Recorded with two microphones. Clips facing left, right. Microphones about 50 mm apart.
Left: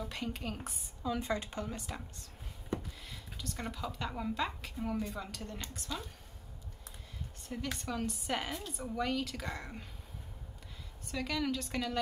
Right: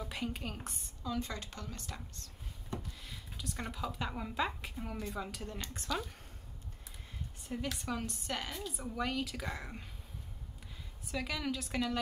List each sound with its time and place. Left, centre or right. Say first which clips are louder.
0.0 s speech: even; centre
1.0 s a woman's voice: left 4 dB; centre
3.1 s speech: even; centre
7.6 s speech: left 2 dB; centre
8.3 s a woman's voice: left 3 dB; centre
8.6 s speech: left 2 dB; centre
11.1 s speech: left 2 dB; centre